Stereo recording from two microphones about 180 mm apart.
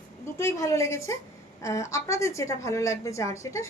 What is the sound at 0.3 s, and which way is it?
A woman's voice, 15° left (ahead or behind).